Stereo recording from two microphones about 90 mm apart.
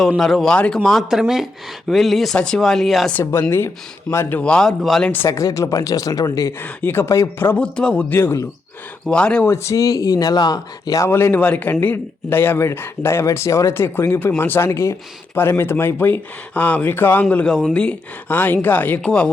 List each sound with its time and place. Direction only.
0.2 s speech: centre (ahead or behind)
4.1 s a man's voice: 30° left (ahead or behind)
4.4 s speech: 10° left (ahead or behind)
4.8 s speech: centre (ahead or behind)
5.2 s speech: 35° left (ahead or behind)
6.6 s a man's voice: 25° left (ahead or behind)
7.6 s speech: 10° left (ahead or behind)
8.1 s a man's voice: 25° left (ahead or behind)
9.0 s speech: 10° left (ahead or behind)
9.5 s speech: 35° left (ahead or behind)
11.1 s a man's voice: 25° left (ahead or behind)